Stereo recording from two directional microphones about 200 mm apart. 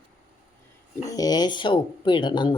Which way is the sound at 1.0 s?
20° left (ahead or behind).